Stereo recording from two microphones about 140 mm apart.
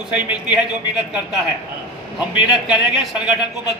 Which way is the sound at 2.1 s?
5° right (ahead or behind).